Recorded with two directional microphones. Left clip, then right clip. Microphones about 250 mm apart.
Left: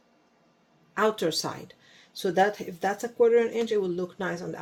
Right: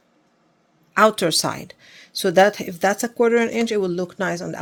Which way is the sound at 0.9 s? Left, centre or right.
Right.